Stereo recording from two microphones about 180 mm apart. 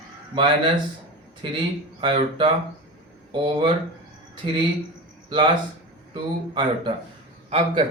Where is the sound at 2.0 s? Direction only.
30° right (ahead or behind).